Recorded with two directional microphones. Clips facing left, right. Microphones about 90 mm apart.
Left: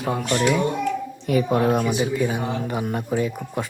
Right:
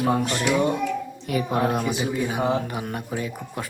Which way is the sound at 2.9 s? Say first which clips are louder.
Left 6 dB; 25° left (ahead or behind).